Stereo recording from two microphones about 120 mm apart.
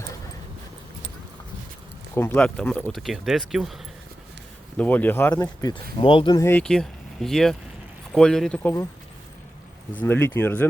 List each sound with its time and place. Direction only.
2.1 s speech: 20° left (ahead or behind)
2.4 s speech: 10° left (ahead or behind)
4.8 s speech: 15° left (ahead or behind)
5.3 s speech: 35° left (ahead or behind)
6.3 s speech: 20° left (ahead or behind)
6.6 s speech: 5° left (ahead or behind)
10.0 s speech: 15° left (ahead or behind)